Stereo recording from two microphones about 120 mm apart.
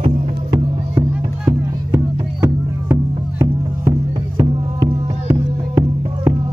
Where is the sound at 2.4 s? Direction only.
20° right (ahead or behind).